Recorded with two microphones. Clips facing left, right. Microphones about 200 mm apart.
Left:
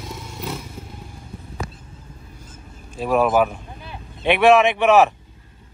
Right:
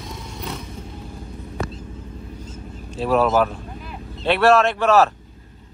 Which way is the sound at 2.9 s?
10° left (ahead or behind).